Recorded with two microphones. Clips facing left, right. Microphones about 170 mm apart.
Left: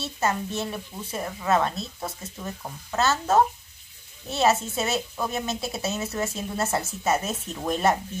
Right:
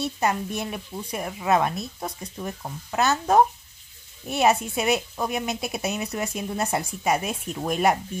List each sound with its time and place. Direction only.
0.0 s a woman's voice: 15° right (ahead or behind)